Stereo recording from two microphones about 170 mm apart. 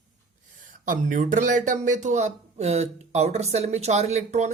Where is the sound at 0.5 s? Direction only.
50° right (ahead or behind).